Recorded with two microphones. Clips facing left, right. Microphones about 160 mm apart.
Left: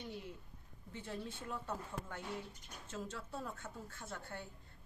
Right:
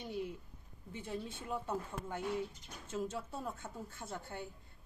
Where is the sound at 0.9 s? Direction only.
15° right (ahead or behind).